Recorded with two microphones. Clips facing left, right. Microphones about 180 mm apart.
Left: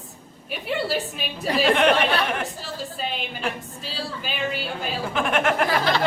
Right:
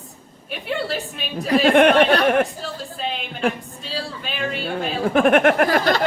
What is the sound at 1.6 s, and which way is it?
Speech, 55° right (ahead or behind).